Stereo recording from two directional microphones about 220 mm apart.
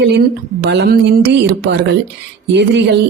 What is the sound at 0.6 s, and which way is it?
Speech, 50° right (ahead or behind).